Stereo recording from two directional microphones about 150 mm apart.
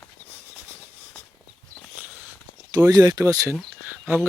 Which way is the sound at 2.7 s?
25° right (ahead or behind).